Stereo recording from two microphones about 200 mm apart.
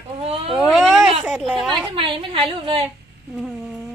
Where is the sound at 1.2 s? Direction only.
Centre (ahead or behind).